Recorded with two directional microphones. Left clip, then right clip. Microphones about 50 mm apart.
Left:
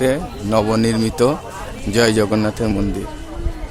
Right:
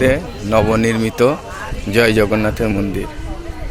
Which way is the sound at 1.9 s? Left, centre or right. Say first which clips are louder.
Right 2 dB; left.